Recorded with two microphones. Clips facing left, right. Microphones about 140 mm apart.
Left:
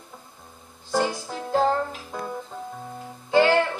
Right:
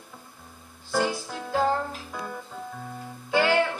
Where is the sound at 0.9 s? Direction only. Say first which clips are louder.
Left 2 dB; centre (ahead or behind).